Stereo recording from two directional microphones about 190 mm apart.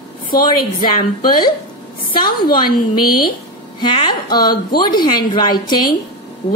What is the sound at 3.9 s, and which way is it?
A woman's voice, 25° left (ahead or behind).